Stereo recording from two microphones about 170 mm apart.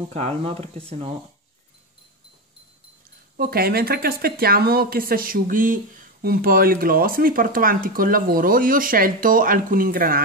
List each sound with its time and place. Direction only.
0.1 s speech: 35° right (ahead or behind)
3.3 s speech: 60° right (ahead or behind)